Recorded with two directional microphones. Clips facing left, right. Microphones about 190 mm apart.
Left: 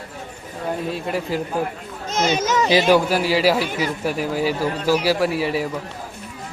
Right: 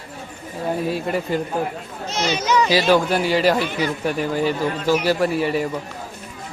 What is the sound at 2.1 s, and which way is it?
Speech, 50° left (ahead or behind).